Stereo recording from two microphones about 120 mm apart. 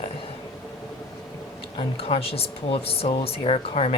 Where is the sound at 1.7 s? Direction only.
55° left (ahead or behind).